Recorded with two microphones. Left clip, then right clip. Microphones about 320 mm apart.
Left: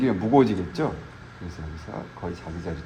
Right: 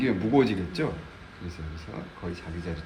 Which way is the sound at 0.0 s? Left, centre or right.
Centre.